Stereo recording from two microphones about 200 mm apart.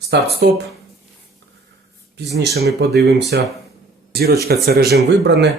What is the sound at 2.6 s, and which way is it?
Speech, 55° right (ahead or behind).